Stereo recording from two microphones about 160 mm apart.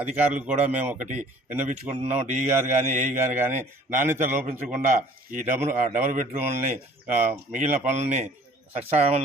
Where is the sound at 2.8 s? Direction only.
45° right (ahead or behind).